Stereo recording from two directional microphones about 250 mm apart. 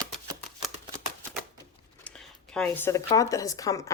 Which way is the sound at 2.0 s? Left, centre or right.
Centre.